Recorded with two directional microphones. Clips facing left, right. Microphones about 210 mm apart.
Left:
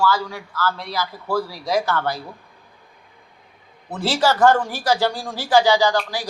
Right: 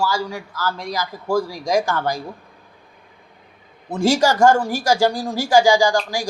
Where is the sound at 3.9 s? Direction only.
15° right (ahead or behind).